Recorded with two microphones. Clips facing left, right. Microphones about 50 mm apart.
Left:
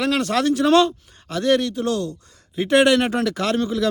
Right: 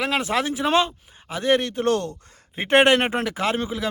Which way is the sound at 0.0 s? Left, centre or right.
Centre.